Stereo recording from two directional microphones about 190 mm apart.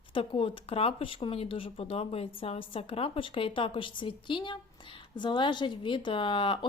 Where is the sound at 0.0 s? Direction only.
25° left (ahead or behind).